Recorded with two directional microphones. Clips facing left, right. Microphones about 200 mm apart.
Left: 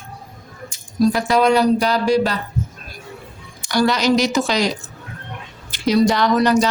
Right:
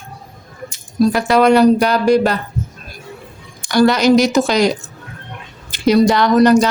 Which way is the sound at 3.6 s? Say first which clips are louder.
Right 5 dB; 55° right (ahead or behind).